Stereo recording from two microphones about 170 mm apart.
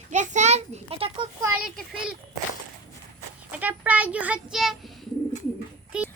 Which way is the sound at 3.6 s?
10° right (ahead or behind).